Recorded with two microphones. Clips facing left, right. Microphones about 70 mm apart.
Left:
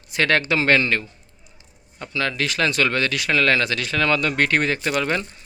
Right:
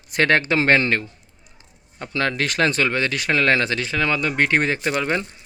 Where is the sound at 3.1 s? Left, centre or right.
Right.